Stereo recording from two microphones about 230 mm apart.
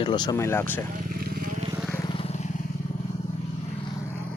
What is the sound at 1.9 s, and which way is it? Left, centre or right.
Vehicle, centre.